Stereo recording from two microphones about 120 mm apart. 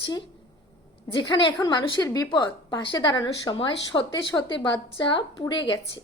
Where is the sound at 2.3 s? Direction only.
40° left (ahead or behind).